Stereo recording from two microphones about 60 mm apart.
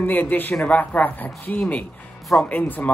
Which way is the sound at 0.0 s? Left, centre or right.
Left.